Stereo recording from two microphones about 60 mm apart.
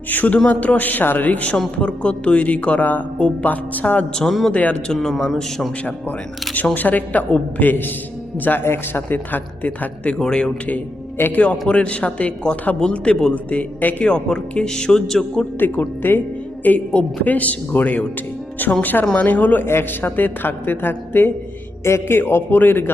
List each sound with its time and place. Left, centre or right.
0.1 s speech: left
4.2 s a man's voice: centre
4.5 s speech: left
4.9 s a man's voice: centre
6.7 s a woman's voice: left
10.2 s speech: centre
11.2 s speech: left; by 15.4 s centre
15.7 s a woman's voice: left